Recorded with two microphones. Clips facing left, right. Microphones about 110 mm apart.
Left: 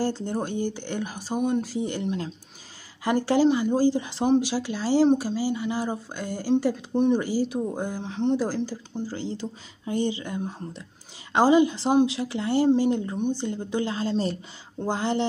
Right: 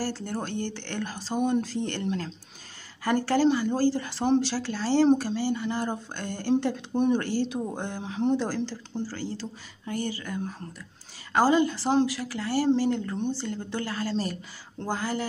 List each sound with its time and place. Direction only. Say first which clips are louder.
0.0 s speech: left 4 dB; 20° left (ahead or behind); by 8.4 s 5° right (ahead or behind)
8.4 s speech: left 2 dB; 5° left (ahead or behind)
9.0 s speech: left 4 dB; 20° left (ahead or behind)